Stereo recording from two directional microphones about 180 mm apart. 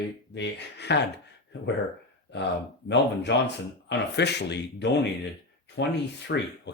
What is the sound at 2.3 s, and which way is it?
Speech, 75° left (ahead or behind).